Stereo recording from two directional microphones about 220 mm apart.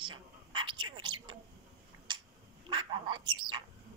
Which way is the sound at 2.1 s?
20° right (ahead or behind).